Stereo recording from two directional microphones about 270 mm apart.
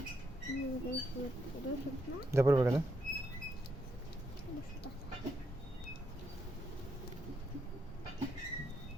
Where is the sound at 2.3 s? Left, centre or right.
Centre.